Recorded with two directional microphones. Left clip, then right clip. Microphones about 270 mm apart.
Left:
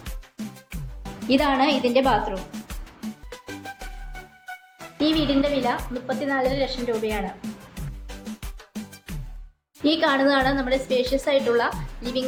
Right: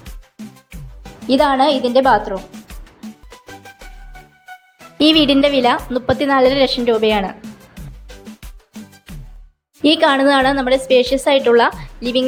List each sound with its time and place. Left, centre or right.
0.0 s music: centre
1.3 s a woman's voice: right
2.3 s music: centre
4.9 s a woman's voice: right
8.0 s music: centre
9.8 s a woman's voice: right